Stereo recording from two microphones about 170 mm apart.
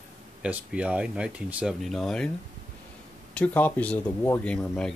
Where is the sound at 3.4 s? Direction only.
10° left (ahead or behind).